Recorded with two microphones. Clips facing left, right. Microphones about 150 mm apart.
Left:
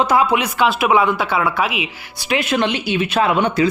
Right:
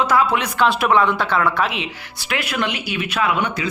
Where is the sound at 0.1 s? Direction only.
15° left (ahead or behind).